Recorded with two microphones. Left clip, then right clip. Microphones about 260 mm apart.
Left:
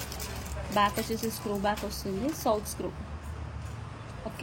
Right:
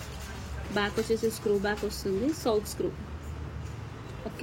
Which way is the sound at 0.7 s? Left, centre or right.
Centre.